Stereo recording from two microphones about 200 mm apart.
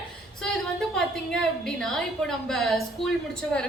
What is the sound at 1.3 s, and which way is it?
A woman's voice, centre (ahead or behind).